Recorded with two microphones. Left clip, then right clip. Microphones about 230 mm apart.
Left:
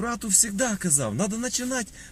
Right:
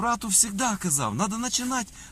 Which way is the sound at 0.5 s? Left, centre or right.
Right.